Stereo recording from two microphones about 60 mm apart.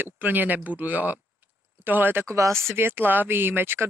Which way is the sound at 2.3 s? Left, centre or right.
Right.